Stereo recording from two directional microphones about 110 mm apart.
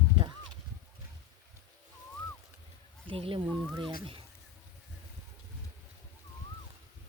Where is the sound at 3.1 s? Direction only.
55° right (ahead or behind).